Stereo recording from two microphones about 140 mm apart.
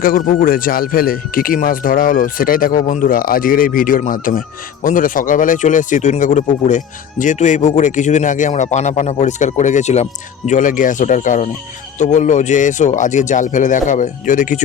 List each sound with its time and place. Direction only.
0.0 s speech: 85° left; by 14.6 s 65° left (ahead or behind)